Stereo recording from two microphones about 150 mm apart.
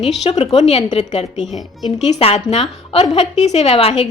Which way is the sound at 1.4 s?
Centre (ahead or behind).